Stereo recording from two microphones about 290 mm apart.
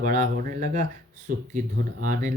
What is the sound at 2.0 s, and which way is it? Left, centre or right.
Speech, right.